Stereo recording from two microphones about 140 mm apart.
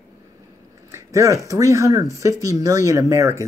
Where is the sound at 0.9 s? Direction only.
20° right (ahead or behind).